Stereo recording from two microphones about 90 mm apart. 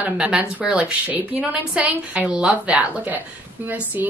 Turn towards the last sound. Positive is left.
turn(degrees=-20)  # may be behind; listen again after turning